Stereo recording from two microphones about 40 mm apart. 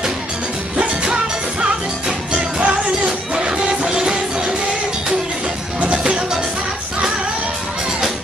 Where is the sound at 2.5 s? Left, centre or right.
Right.